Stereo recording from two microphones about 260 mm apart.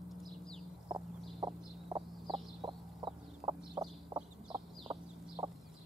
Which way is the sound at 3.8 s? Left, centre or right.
Centre.